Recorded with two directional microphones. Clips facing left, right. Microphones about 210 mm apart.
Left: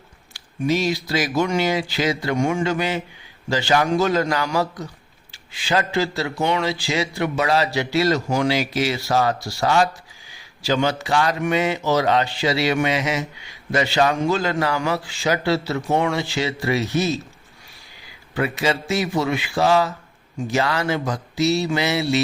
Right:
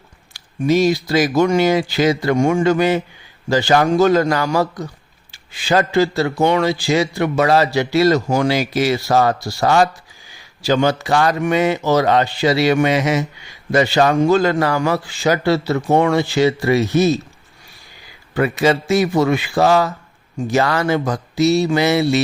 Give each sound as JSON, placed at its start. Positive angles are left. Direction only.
{"t": 0.7, "sound": "speech", "side_deg": -45}
{"t": 18.3, "sound": "speech", "side_deg": -50}